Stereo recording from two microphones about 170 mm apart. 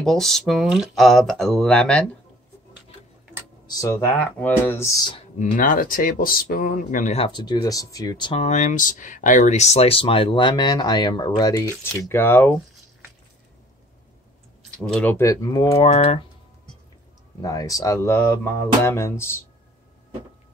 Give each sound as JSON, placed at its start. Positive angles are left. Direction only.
{"t": 0.0, "sound": "speech", "side_deg": 0}
{"t": 3.6, "sound": "speech", "side_deg": 20}
{"t": 5.4, "sound": "speech", "side_deg": 55}
{"t": 7.2, "sound": "speech", "side_deg": 25}
{"t": 8.5, "sound": "speech", "side_deg": 45}
{"t": 14.8, "sound": "speech", "side_deg": 5}
{"t": 15.9, "sound": "speech", "side_deg": 35}
{"t": 17.4, "sound": "speech", "side_deg": 20}